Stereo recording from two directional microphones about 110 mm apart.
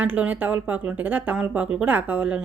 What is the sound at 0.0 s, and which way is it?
Speech, 15° right (ahead or behind).